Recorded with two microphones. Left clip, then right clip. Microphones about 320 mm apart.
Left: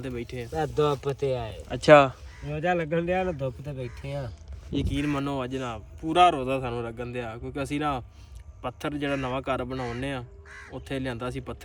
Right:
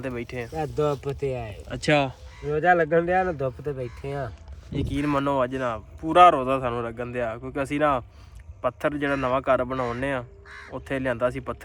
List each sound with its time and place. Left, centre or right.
0.0 s speech: centre
0.5 s speech: left
1.9 s speech: centre